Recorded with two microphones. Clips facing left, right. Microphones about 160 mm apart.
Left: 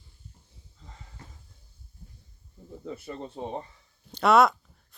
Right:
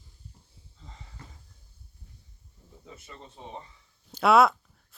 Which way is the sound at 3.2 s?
50° left (ahead or behind).